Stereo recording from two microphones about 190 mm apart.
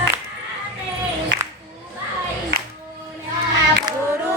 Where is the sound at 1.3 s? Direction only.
70° right (ahead or behind).